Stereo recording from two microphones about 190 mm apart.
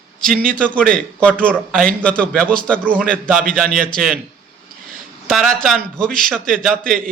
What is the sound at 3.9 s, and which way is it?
Speech, centre (ahead or behind).